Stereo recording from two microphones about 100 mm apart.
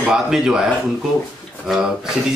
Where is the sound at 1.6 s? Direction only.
5° right (ahead or behind).